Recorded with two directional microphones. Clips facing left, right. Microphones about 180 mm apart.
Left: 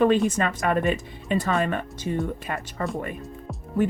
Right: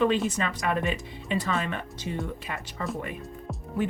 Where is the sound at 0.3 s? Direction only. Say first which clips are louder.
Left 4 dB; 50° left (ahead or behind).